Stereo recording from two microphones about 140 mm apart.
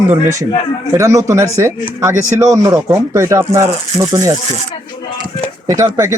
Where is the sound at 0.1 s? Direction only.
20° right (ahead or behind).